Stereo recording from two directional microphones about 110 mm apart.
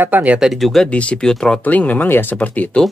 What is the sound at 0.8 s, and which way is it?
Speech, 10° left (ahead or behind).